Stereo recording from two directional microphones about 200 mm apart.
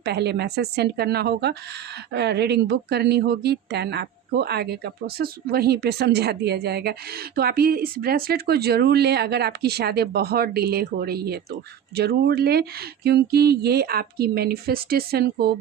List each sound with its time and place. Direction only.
0.0 s a woman's voice: 55° right (ahead or behind)